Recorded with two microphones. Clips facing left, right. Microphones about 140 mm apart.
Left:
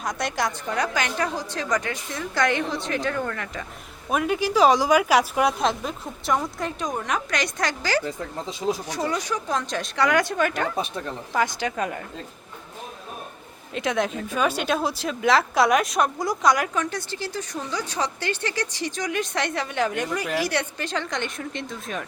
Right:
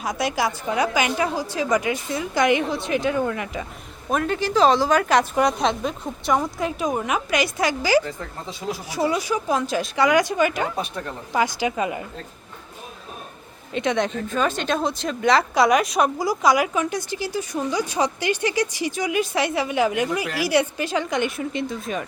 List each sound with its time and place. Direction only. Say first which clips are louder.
0.0 s speech: right 3 dB; 5° right (ahead or behind)
4.1 s speech: right 1 dB; 10° left (ahead or behind); by 8.0 s 10° right (ahead or behind)
8.0 s speech: left 2 dB; 20° left (ahead or behind)
8.9 s speech: right 4 dB; 10° right (ahead or behind)
13.7 s speech: right 2 dB; centre (ahead or behind)